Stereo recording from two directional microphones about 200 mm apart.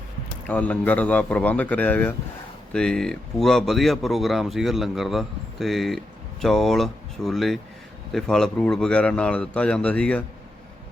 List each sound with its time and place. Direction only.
0.4 s speech: 5° left (ahead or behind)